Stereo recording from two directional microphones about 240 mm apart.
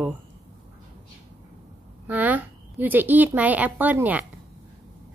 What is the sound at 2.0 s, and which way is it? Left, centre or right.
A woman's voice, centre.